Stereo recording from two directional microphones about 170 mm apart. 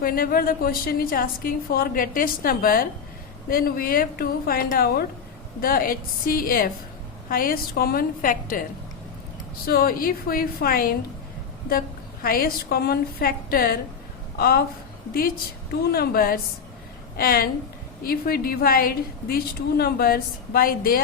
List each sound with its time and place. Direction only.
0.0 s a woman's voice: 60° left (ahead or behind)
9.6 s a woman's voice: 60° left (ahead or behind)
12.2 s a woman's voice: 60° left (ahead or behind)
15.7 s a woman's voice: 65° left (ahead or behind)